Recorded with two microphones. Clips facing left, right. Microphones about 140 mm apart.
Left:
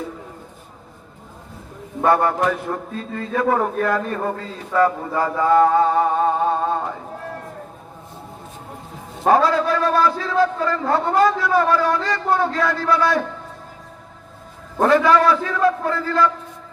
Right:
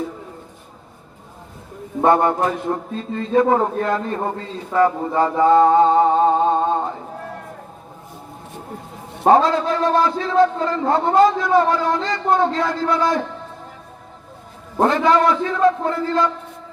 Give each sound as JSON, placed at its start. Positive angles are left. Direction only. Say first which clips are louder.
{"t": 2.0, "sound": "a man's voice", "louder": "right 2 dB", "side_deg": -25}
{"t": 9.2, "sound": "a man's voice", "louder": "right 2 dB", "side_deg": -25}
{"t": 14.8, "sound": "a man's voice", "louder": "left 1 dB", "side_deg": -20}